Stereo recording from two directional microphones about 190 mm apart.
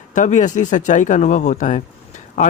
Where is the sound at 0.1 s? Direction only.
40° left (ahead or behind).